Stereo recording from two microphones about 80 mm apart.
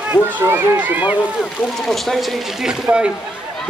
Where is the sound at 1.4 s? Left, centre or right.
Centre.